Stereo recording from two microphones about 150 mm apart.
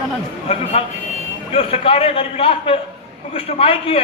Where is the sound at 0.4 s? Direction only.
40° left (ahead or behind).